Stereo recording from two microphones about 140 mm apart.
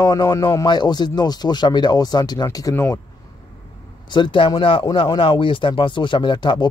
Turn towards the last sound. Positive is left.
turn(degrees=30)  # may be behind; listen again after turning